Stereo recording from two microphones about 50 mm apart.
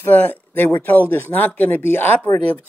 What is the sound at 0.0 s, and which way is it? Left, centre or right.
Speech, left.